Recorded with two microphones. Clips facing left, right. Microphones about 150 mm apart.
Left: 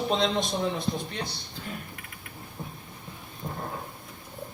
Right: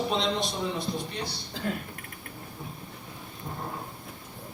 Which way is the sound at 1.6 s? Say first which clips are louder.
Right 9 dB; 90° right.